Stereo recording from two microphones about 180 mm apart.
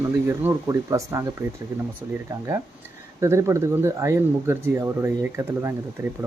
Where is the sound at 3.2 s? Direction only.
15° right (ahead or behind).